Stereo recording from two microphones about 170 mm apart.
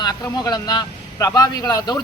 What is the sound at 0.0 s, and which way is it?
Speech, 25° left (ahead or behind).